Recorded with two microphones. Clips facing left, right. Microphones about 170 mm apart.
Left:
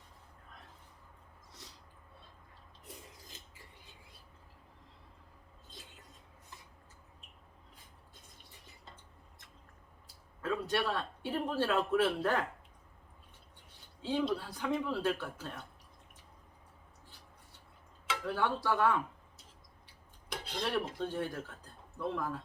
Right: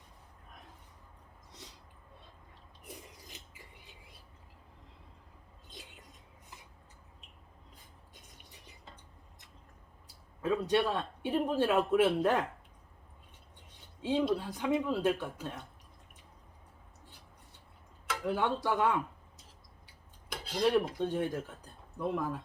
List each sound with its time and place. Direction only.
2.8 s a sound: 15° right (ahead or behind)
10.4 s a man's voice: 20° right (ahead or behind)
14.0 s a man's voice: 20° right (ahead or behind)
18.3 s a man's voice: 20° right (ahead or behind)
20.5 s a man's voice: 15° right (ahead or behind)